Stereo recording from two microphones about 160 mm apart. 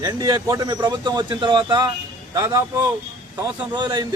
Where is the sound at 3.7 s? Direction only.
30° right (ahead or behind).